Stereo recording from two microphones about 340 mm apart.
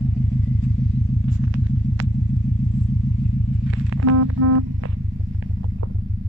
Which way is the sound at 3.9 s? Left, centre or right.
Right.